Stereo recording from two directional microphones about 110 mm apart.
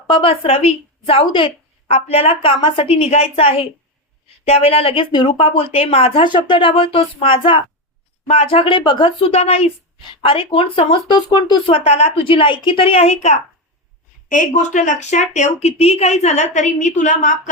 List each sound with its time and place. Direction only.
0.1 s a woman's voice: 55° left (ahead or behind)
1.9 s a woman's voice: 70° left (ahead or behind)
5.1 s speech: 45° left (ahead or behind)
8.3 s a woman's voice: 65° left (ahead or behind)
10.0 s speech: 55° left (ahead or behind); by 13.4 s 85° left
14.5 s a woman's voice: 90° left